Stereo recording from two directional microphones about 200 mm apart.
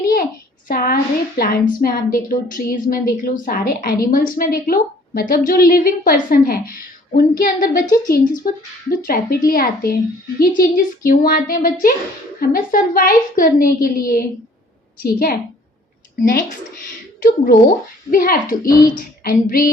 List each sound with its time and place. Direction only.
0.7 s a woman's voice: 45° left (ahead or behind)
17.2 s a woman's voice: 50° left (ahead or behind)